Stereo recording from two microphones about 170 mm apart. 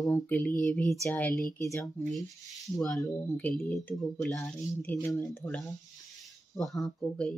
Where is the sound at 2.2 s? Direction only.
20° left (ahead or behind).